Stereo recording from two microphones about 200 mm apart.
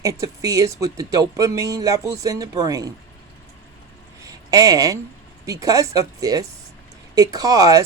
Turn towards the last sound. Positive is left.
turn(degrees=-20)  # may be behind; listen again after turning